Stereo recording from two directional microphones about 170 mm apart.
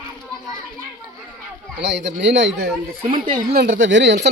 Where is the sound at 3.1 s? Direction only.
55° right (ahead or behind).